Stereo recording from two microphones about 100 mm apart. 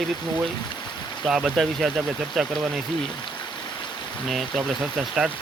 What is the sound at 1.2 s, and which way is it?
Speech, 5° right (ahead or behind).